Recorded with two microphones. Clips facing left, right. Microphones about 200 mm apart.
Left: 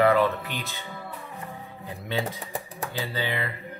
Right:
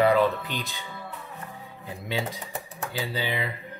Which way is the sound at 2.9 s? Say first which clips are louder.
Even; 10° right (ahead or behind).